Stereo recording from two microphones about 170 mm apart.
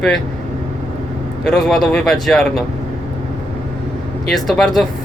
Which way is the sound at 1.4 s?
Centre (ahead or behind).